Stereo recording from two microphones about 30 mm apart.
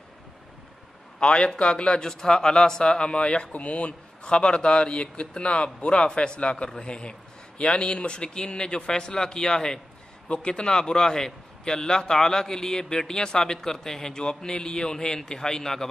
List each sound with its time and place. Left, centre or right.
1.2 s speech: left
2.0 s a man's voice: left
3.5 s speech: left
4.2 s a man's voice: left
10.2 s speech: left
10.5 s a man's voice: left